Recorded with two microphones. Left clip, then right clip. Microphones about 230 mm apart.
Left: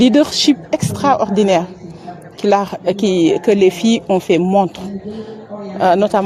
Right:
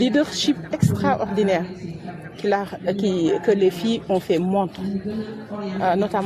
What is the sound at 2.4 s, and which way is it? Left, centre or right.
Speech, left.